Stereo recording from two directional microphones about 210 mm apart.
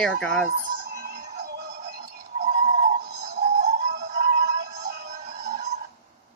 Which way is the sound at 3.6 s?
50° right (ahead or behind).